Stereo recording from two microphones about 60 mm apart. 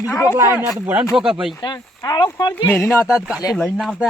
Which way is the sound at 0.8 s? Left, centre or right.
Right.